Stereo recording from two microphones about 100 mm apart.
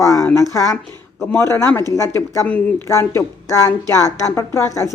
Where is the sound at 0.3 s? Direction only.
30° left (ahead or behind).